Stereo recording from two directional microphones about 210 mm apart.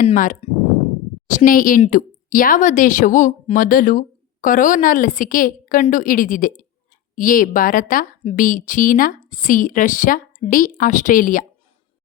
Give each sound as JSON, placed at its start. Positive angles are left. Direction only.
{"t": 0.0, "sound": "speech", "side_deg": 40}